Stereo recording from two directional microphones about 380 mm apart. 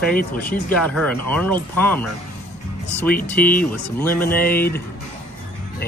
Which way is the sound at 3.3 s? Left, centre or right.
Left.